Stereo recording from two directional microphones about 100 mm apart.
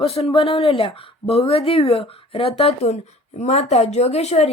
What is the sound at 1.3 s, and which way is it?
A woman's voice, 80° left.